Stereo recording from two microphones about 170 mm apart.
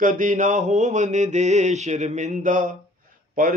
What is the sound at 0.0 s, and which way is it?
Speech, 50° right (ahead or behind).